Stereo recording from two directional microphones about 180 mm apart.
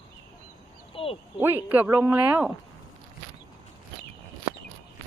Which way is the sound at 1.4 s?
10° right (ahead or behind).